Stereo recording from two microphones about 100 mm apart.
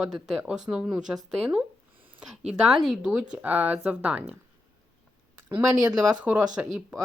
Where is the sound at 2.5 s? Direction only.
5° right (ahead or behind).